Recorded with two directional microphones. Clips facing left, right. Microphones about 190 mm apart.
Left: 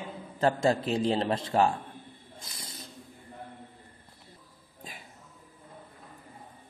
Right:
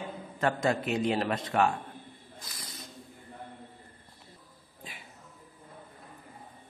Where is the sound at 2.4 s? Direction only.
25° left (ahead or behind).